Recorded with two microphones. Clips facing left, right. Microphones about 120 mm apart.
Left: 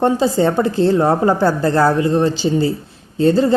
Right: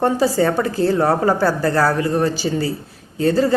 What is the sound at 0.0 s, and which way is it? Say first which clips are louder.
A woman's voice: left 2 dB; 20° left (ahead or behind).